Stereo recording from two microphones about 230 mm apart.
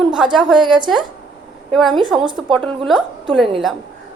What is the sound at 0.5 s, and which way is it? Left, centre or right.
Speech, centre.